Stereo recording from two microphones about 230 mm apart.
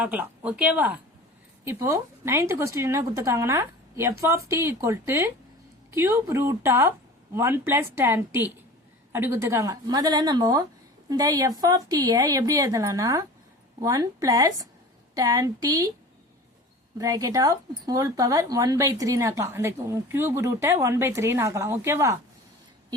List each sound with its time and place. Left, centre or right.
0.0 s speech: centre
17.0 s speech: centre